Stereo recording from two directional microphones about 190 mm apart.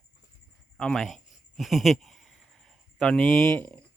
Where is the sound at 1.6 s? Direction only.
Centre (ahead or behind).